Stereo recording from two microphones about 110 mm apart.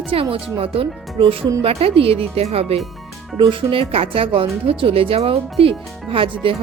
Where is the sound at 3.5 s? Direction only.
50° right (ahead or behind).